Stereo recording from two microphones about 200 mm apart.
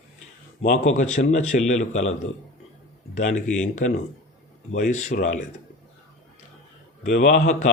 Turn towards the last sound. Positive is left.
turn(degrees=40)  # may be behind; listen again after turning